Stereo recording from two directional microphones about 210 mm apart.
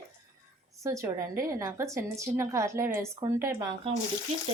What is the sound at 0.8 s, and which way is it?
A woman's voice, 15° right (ahead or behind).